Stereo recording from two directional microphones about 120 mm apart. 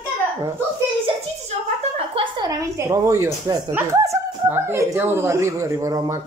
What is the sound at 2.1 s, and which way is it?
A woman's voice, 35° right (ahead or behind).